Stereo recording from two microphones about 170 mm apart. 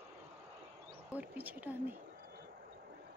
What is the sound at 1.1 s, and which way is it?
Speech, 10° right (ahead or behind).